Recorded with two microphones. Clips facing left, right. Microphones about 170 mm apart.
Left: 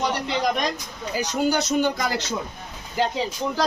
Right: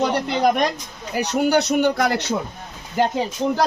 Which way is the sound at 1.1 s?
65° right (ahead or behind).